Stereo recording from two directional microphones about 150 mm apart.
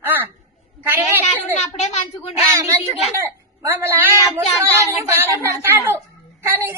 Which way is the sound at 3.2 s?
15° right (ahead or behind).